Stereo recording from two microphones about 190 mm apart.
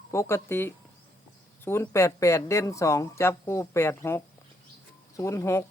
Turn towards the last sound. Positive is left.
turn(degrees=15)  # may be behind; listen again after turning